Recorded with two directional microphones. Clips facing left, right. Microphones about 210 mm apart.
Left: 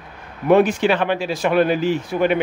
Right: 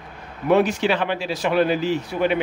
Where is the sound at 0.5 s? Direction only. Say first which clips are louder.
Left 3 dB; 50° left (ahead or behind).